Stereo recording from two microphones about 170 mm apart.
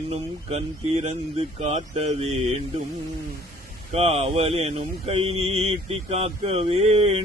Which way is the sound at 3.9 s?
35° right (ahead or behind).